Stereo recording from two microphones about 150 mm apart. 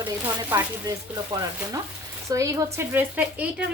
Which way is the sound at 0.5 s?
15° right (ahead or behind).